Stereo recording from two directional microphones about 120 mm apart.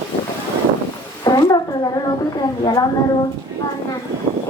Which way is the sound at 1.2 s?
30° left (ahead or behind).